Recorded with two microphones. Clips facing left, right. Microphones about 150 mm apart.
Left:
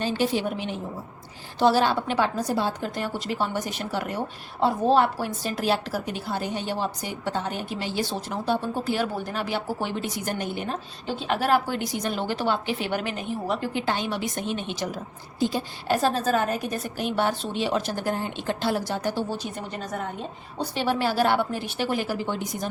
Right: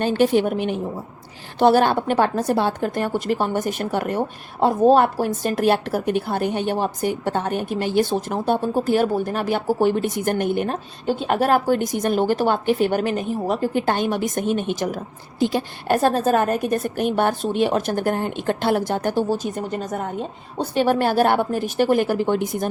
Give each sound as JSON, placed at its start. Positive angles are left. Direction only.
{"t": 0.0, "sound": "a woman's voice", "side_deg": -55}